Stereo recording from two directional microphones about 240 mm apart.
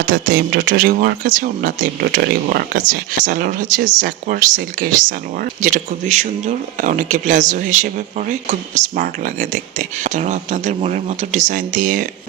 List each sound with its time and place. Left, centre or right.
0.0 s speech: right